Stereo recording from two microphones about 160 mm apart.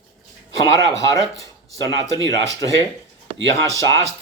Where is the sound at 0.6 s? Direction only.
20° left (ahead or behind).